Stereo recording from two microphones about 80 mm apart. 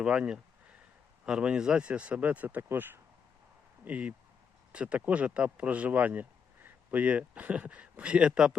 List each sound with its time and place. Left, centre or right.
0.0 s speech: centre